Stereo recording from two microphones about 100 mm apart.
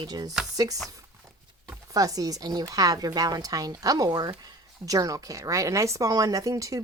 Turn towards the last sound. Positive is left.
turn(degrees=-35)  # may be behind; listen again after turning